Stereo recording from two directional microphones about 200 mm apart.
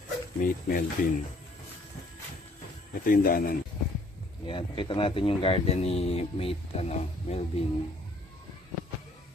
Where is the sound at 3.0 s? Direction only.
45° left (ahead or behind).